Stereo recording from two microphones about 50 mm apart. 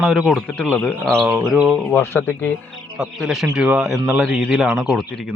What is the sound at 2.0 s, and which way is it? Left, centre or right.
Speech, left.